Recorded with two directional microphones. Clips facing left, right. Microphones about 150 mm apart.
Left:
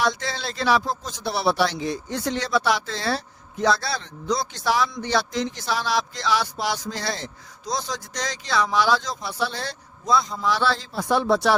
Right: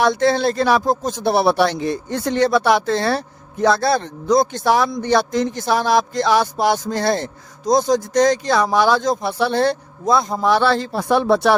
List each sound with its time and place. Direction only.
0.0 s speech: 55° right (ahead or behind)